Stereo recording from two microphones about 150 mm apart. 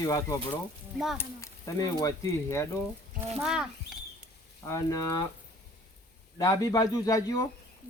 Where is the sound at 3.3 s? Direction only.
5° right (ahead or behind).